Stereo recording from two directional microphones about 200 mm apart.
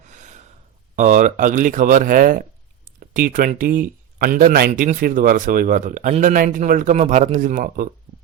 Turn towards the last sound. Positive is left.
turn(degrees=-40)  # may be behind; listen again after turning